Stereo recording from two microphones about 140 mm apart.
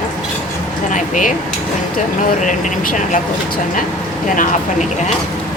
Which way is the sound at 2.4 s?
65° left (ahead or behind).